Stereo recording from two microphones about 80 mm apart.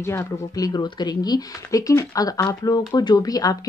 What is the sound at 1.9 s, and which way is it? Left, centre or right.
Speech, left.